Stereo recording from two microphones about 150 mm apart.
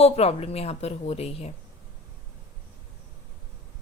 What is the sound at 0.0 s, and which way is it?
A woman's voice, 45° left (ahead or behind).